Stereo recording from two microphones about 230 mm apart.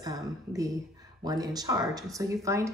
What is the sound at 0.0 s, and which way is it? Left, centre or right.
Speech, centre.